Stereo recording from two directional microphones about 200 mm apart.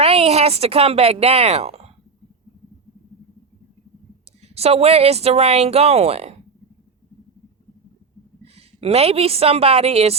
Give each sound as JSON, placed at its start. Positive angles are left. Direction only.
{"t": 0.0, "sound": "speech", "side_deg": -30}
{"t": 4.4, "sound": "speech", "side_deg": -30}
{"t": 8.5, "sound": "speech", "side_deg": -30}